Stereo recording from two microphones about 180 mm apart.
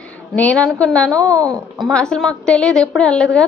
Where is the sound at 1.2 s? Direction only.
20° right (ahead or behind).